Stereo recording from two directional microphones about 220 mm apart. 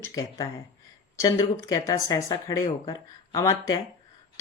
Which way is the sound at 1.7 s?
15° left (ahead or behind).